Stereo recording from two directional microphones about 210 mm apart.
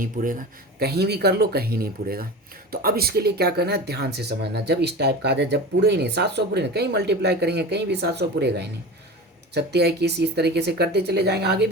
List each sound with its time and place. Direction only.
0.0 s speech: 40° right (ahead or behind)